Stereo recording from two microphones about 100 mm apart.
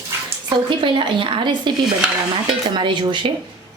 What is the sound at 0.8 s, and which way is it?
Speech, 55° right (ahead or behind).